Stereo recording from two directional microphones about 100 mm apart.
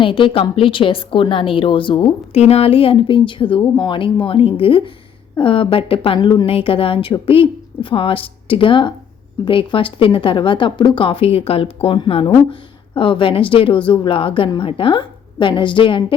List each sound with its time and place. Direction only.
0.0 s speech: 60° left (ahead or behind)
2.3 s speech: 90° left; by 6.1 s 65° left (ahead or behind)
6.1 s a woman's voice: 45° left (ahead or behind)
6.4 s speech: 70° left (ahead or behind)